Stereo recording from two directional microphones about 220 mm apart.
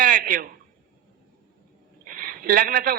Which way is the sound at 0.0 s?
35° right (ahead or behind).